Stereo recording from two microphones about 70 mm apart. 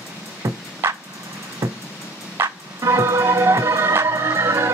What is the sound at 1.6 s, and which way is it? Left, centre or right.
Music, right.